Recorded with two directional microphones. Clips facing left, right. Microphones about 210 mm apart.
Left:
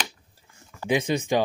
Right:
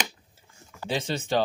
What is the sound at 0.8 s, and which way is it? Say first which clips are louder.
Speech: left 6 dB; 15° left (ahead or behind).